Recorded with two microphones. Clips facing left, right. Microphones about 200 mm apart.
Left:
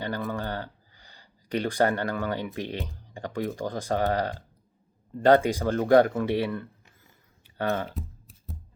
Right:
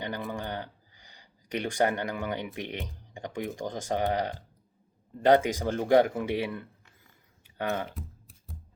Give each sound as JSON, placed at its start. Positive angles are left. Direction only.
{"t": 0.0, "sound": "speech", "side_deg": -15}